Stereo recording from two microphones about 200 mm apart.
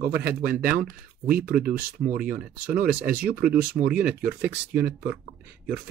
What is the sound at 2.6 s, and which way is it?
Speech, 50° right (ahead or behind).